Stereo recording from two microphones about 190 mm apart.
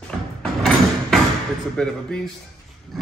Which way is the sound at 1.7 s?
5° left (ahead or behind).